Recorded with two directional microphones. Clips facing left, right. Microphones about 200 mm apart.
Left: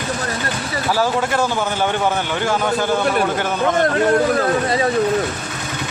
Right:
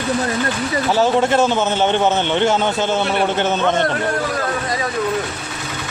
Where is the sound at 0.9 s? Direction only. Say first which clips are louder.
Right 3 dB; 25° right (ahead or behind).